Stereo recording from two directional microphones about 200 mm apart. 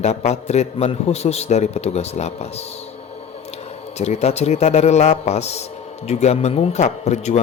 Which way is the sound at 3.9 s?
35° left (ahead or behind).